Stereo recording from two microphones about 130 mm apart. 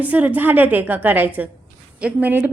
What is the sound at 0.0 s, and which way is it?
A woman's voice, 10° right (ahead or behind).